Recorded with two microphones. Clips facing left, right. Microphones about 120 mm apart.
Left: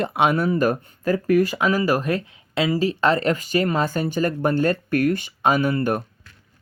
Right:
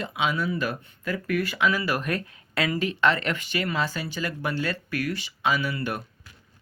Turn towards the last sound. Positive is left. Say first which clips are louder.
# left 7 dB
turn(degrees=45)  # may be behind; listen again after turning